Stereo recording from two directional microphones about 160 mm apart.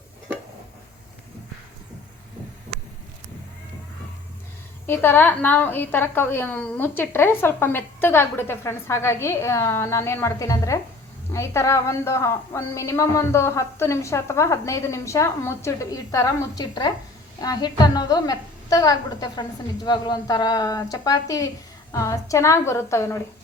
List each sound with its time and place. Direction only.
4.9 s a woman's voice: 10° left (ahead or behind)